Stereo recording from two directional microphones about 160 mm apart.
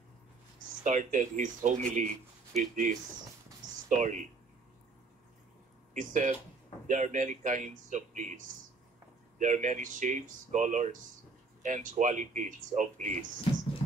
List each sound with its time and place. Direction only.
0.8 s speech: 50° right (ahead or behind)
5.9 s speech: 50° right (ahead or behind)
9.4 s speech: 50° right (ahead or behind)